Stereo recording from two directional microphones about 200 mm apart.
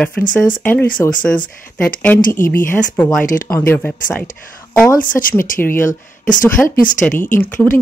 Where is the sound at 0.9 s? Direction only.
40° left (ahead or behind).